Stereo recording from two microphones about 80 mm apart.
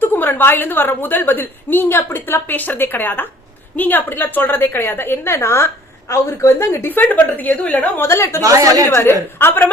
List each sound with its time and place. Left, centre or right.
0.0 s a woman's voice: left
6.9 s a woman's voice: left
8.0 s a woman's voice: left
8.4 s a woman's voice: right
9.4 s a woman's voice: left